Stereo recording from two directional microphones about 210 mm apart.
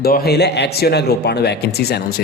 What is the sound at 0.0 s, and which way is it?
Speech, 50° left (ahead or behind).